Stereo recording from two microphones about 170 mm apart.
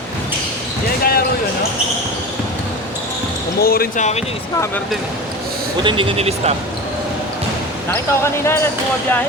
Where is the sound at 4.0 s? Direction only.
40° left (ahead or behind).